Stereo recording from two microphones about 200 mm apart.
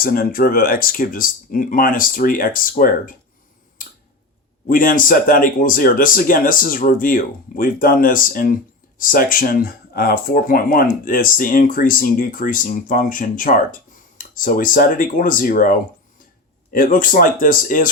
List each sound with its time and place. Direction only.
0.0 s speech: 45° left (ahead or behind)
4.7 s speech: 45° left (ahead or behind)
16.7 s speech: 45° left (ahead or behind)